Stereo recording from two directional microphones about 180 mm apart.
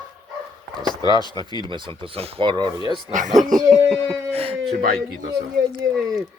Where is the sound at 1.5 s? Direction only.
25° right (ahead or behind).